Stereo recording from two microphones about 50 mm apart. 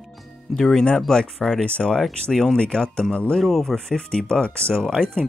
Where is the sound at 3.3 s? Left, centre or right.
Centre.